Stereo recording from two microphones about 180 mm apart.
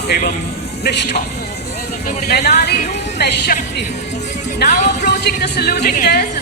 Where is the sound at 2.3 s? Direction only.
60° left (ahead or behind).